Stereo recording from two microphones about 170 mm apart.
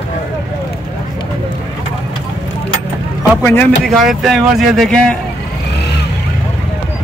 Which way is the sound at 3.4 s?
10° left (ahead or behind).